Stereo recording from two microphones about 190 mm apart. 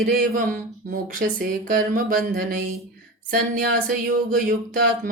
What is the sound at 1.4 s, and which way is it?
Speech, 50° right (ahead or behind).